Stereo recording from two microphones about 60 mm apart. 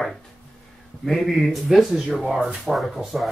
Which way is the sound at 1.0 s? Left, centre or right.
Centre.